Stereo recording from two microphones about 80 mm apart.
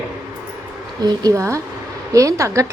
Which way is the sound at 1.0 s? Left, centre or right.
Right.